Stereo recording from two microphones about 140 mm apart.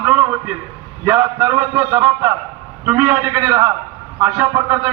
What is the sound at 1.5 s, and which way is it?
A man's voice, 15° right (ahead or behind).